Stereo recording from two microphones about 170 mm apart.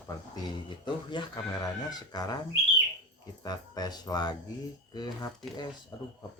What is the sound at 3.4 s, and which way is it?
Speech, 25° left (ahead or behind).